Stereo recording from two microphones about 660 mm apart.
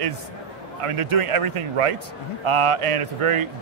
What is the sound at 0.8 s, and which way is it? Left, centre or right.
Speech, right.